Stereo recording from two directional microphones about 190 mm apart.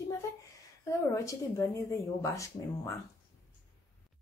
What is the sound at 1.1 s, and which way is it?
Speech, 15° left (ahead or behind).